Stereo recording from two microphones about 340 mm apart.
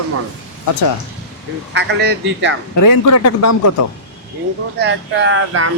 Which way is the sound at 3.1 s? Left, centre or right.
Left.